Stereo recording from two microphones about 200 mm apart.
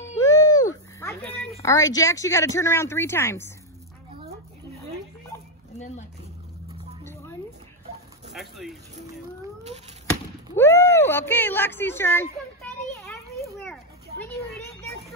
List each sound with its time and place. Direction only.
0.2 s a sound: 20° left (ahead or behind)
1.2 s a sound: 5° left (ahead or behind)
1.6 s speech: 15° left (ahead or behind)
7.1 s music: 15° left (ahead or behind)
8.3 s speech: centre (ahead or behind)
10.5 s speech: 10° left (ahead or behind)
12.9 s children playing: 15° left (ahead or behind)